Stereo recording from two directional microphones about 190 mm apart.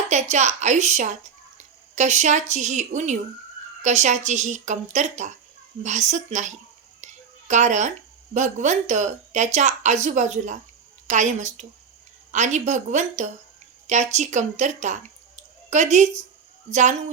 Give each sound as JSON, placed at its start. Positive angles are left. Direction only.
{"t": 0.1, "sound": "a woman's voice", "side_deg": -35}